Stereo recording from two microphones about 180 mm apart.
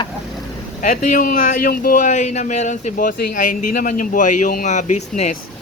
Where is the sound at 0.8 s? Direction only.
45° left (ahead or behind).